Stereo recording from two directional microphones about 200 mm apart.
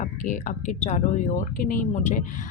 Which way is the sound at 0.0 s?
40° left (ahead or behind).